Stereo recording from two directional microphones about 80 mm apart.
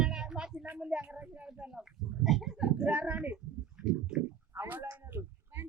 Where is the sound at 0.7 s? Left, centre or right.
Centre.